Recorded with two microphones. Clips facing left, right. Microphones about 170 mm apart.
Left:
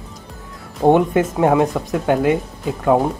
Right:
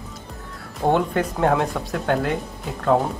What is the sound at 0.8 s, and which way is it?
Speech, 10° left (ahead or behind).